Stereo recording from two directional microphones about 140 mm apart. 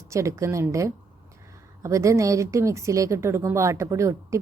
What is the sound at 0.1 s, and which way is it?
A woman's voice, 20° right (ahead or behind).